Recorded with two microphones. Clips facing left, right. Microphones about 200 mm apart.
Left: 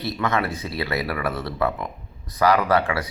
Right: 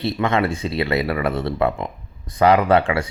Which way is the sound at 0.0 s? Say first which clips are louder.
Right 4 dB; 25° right (ahead or behind).